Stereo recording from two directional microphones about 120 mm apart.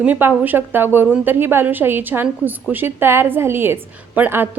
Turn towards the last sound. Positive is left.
turn(degrees=-15)  # may be behind; listen again after turning